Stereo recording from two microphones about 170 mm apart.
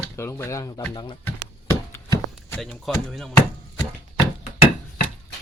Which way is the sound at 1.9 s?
15° left (ahead or behind).